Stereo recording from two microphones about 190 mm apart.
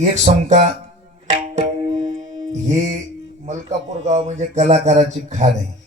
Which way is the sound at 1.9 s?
35° right (ahead or behind).